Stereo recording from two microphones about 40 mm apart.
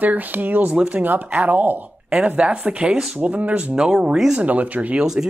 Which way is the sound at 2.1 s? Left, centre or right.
Right.